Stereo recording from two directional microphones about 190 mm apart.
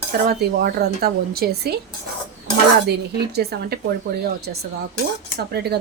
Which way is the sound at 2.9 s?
60° right (ahead or behind).